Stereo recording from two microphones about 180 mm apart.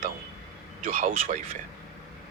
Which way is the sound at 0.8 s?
40° right (ahead or behind).